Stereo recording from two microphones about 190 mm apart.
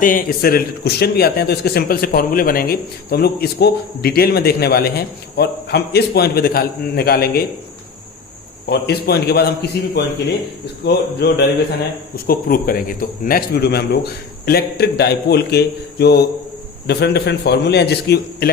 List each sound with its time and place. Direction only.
0.0 s a man's voice: 45° left (ahead or behind)
8.7 s a man's voice: 55° left (ahead or behind)